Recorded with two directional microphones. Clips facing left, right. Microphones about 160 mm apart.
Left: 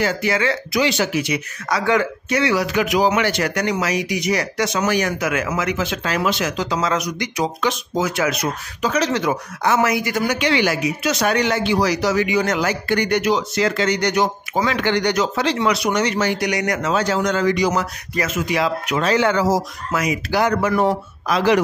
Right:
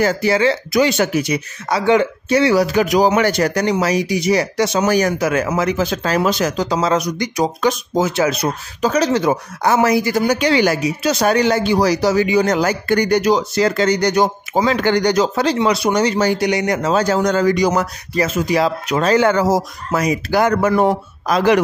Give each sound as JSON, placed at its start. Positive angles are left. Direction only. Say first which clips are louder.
{"t": 0.0, "sound": "speech", "louder": "right 5 dB", "side_deg": -35}
{"t": 0.7, "sound": "speech", "louder": "right 3 dB", "side_deg": -50}
{"t": 1.7, "sound": "speech", "louder": "right 4 dB", "side_deg": -25}
{"t": 8.0, "sound": "speech", "louder": "right 4 dB", "side_deg": -30}
{"t": 19.9, "sound": "speech", "louder": "right 4 dB", "side_deg": -35}